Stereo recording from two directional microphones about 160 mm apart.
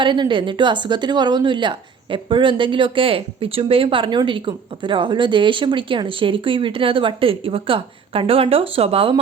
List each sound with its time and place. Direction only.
0.0 s a woman's voice: 30° right (ahead or behind)